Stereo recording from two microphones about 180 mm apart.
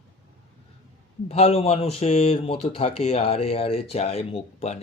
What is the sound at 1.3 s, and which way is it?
Speech, 35° left (ahead or behind).